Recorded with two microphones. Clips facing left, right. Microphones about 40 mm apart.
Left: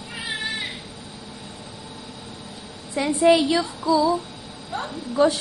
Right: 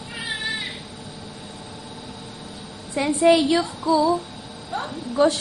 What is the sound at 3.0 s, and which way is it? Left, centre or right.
Speech, centre.